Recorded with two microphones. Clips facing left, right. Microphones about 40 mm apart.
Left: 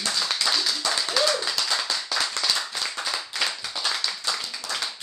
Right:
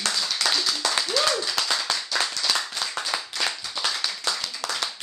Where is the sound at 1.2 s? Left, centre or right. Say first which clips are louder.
Even; right.